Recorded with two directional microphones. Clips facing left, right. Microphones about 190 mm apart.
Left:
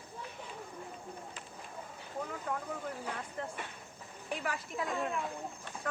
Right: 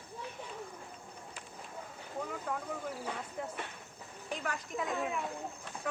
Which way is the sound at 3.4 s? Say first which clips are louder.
Even; 5° right (ahead or behind).